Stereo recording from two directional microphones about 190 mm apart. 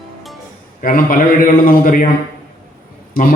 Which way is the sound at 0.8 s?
45° left (ahead or behind).